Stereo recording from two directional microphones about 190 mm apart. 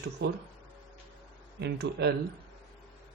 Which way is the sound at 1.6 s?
60° right (ahead or behind).